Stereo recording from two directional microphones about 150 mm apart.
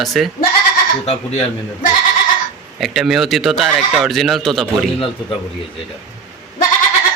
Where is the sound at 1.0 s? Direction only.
45° left (ahead or behind).